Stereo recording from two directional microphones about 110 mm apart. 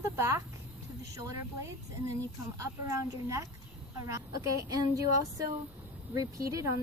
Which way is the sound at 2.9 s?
30° right (ahead or behind).